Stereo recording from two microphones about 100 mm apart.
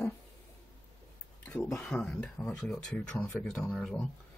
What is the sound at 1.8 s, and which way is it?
Speech, 5° left (ahead or behind).